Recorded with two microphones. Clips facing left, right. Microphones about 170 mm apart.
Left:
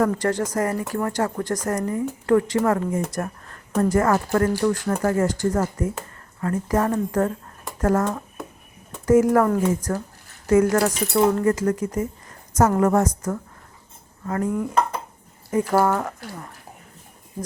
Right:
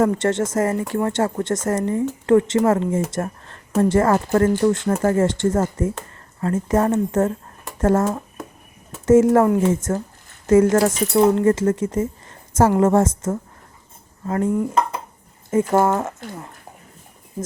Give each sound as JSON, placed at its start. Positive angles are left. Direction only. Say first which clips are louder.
{"t": 0.0, "sound": "speech", "louder": "right 3 dB", "side_deg": -25}
{"t": 3.1, "sound": "a sound", "louder": "right 3 dB", "side_deg": -30}
{"t": 3.8, "sound": "speech", "louder": "right 3 dB", "side_deg": -25}
{"t": 9.0, "sound": "speech", "louder": "right 3 dB", "side_deg": -25}